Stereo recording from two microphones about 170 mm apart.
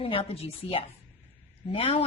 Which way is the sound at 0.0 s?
35° left (ahead or behind).